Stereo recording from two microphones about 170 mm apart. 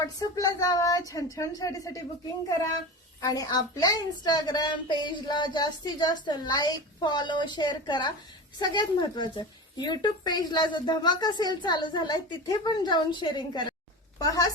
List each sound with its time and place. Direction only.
0.0 s a woman's voice: 20° left (ahead or behind)
3.2 s a woman's voice: 20° left (ahead or behind)